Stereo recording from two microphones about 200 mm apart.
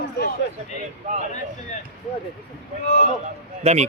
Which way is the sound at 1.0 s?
35° right (ahead or behind).